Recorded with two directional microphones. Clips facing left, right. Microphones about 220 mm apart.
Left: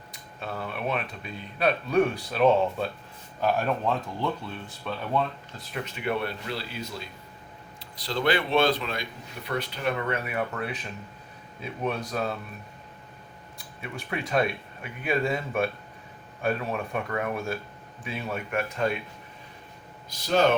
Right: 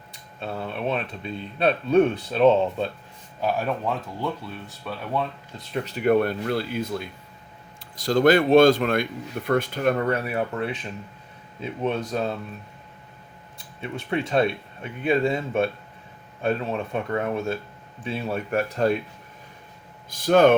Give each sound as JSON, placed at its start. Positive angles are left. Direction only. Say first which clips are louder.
{"t": 0.1, "sound": "speech", "louder": "right 3 dB", "side_deg": -30}
{"t": 3.4, "sound": "speech", "louder": "even", "side_deg": -5}
{"t": 5.7, "sound": "speech", "louder": "right 9 dB", "side_deg": -35}
{"t": 13.8, "sound": "speech", "louder": "right 6 dB", "side_deg": -25}
{"t": 20.1, "sound": "speech", "louder": "right 6 dB", "side_deg": -50}